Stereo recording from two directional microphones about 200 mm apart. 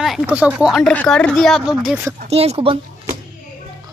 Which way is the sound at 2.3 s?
30° right (ahead or behind).